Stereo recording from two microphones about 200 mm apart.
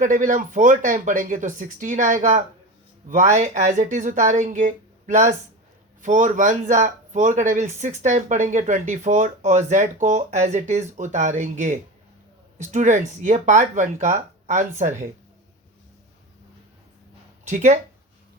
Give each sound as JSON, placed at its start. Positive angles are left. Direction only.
{"t": 0.0, "sound": "speech", "side_deg": -40}
{"t": 17.4, "sound": "speech", "side_deg": -35}